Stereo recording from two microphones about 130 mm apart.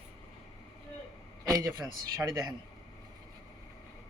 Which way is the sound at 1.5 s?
30° right (ahead or behind).